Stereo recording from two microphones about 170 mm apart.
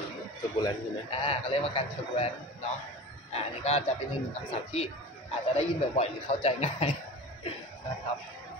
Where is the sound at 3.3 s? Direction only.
40° left (ahead or behind).